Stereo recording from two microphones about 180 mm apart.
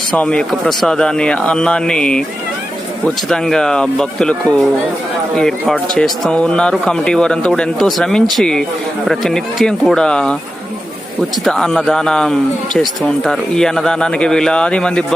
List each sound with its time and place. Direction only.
0.2 s speech: 5° left (ahead or behind)
3.2 s speech: centre (ahead or behind)
11.4 s speech: 5° left (ahead or behind)